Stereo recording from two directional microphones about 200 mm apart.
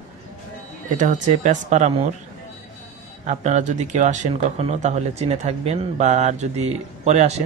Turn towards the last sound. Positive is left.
turn(degrees=-35)  # may be behind; listen again after turning